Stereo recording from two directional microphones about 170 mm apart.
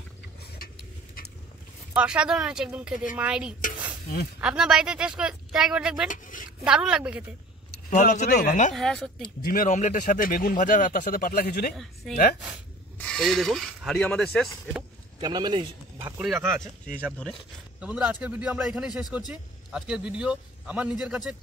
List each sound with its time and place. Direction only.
0.6 s a sound: 60° left (ahead or behind)
2.0 s speech: 5° right (ahead or behind)
6.0 s a man's voice: 50° left (ahead or behind)
6.6 s speech: 5° right (ahead or behind)
7.9 s a man's voice: 45° left (ahead or behind)
8.7 s speech: centre (ahead or behind)
9.4 s speech: 55° left (ahead or behind)
11.7 s speech: centre (ahead or behind)
15.1 s a man's voice: 25° right (ahead or behind)
16.2 s speech: 10° right (ahead or behind)
16.8 s speech: 5° left (ahead or behind)
17.7 s speech: 5° right (ahead or behind)